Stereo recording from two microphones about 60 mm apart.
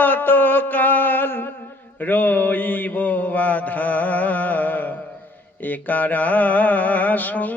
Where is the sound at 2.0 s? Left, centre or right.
Left.